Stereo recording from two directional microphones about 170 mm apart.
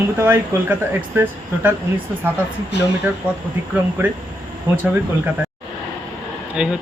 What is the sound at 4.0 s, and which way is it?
Speech, 10° right (ahead or behind).